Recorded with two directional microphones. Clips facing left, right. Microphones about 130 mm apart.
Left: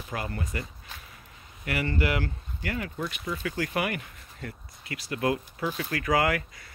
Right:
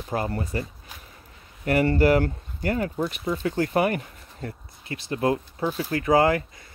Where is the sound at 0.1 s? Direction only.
35° right (ahead or behind).